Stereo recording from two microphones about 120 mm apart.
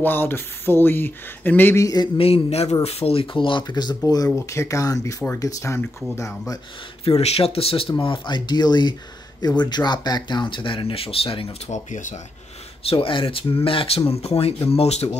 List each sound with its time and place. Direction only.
0.0 s speech: 20° left (ahead or behind)
2.1 s speech: 55° left (ahead or behind); by 6.6 s 25° left (ahead or behind)
7.2 s speech: 55° left (ahead or behind)
11.7 s speech: 90° left
12.8 s speech: 45° left (ahead or behind)